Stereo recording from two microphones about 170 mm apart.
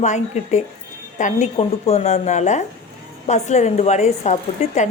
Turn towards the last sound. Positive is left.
turn(degrees=45)  # may be behind; listen again after turning